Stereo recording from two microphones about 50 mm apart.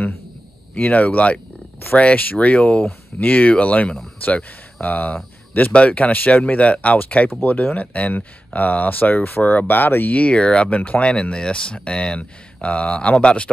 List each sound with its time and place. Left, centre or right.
0.7 s speech: left
10.1 s speech: left